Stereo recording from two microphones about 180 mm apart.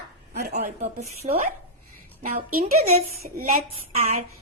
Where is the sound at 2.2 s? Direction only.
55° right (ahead or behind).